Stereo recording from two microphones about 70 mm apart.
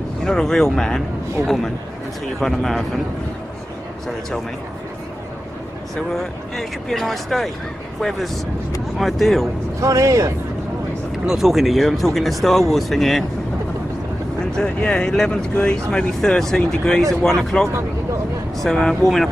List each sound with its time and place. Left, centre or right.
0.2 s speech: centre
2.4 s speech: centre
6.1 s speech: centre
9.8 s speech: right
11.2 s speech: centre
14.4 s speech: centre